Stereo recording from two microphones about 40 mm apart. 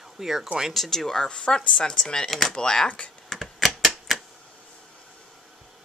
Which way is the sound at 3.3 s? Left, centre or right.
Centre.